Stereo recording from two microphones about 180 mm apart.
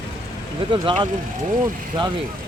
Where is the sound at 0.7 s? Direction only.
25° right (ahead or behind).